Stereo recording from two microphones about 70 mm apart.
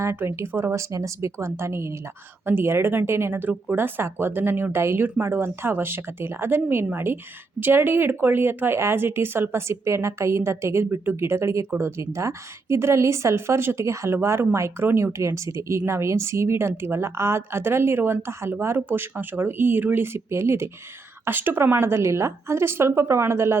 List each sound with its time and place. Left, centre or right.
0.0 s speech: right